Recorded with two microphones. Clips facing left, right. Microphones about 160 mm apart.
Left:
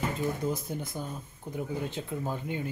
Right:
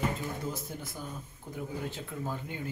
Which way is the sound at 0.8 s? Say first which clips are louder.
Left 4 dB; 20° left (ahead or behind).